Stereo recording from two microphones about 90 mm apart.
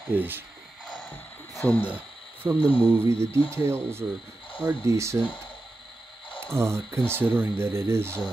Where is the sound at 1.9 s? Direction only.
15° right (ahead or behind).